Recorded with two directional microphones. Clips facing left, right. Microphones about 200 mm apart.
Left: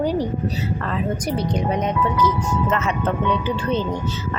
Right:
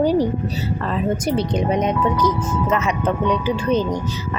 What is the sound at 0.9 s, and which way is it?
Speech, 25° right (ahead or behind).